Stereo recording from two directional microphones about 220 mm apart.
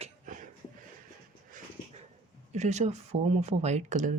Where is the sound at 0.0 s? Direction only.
35° right (ahead or behind).